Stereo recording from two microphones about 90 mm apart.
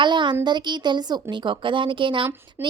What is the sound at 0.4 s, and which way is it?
A woman's voice, 55° right (ahead or behind).